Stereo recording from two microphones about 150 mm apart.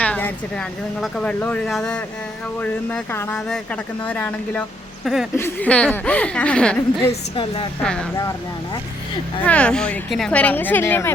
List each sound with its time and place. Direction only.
0.0 s speech: 10° left (ahead or behind)
5.0 s speech: centre (ahead or behind)
5.4 s speech: 10° left (ahead or behind)
7.3 s a woman's voice: 35° left (ahead or behind)
7.8 s speech: 5° left (ahead or behind)
9.4 s speech: 10° left (ahead or behind)